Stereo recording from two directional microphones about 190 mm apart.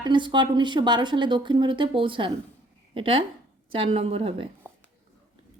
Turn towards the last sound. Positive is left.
turn(degrees=-30)  # may be behind; listen again after turning